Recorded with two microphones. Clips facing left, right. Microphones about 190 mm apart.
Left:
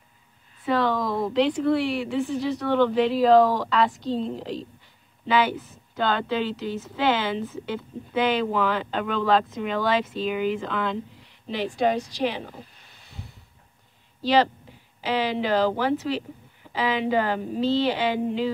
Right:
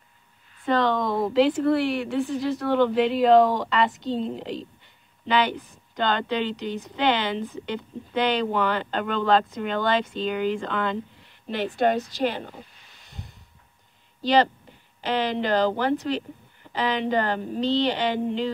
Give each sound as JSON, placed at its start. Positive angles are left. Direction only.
{"t": 0.7, "sound": "speech", "side_deg": 5}
{"t": 14.2, "sound": "speech", "side_deg": 0}